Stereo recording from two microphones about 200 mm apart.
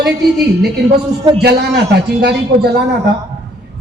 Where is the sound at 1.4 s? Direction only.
55° right (ahead or behind).